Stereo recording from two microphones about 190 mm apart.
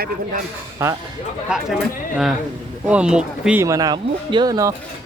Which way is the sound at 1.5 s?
Centre (ahead or behind).